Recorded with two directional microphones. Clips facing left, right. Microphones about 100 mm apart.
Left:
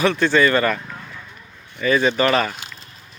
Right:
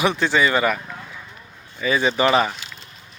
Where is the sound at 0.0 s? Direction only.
15° right (ahead or behind).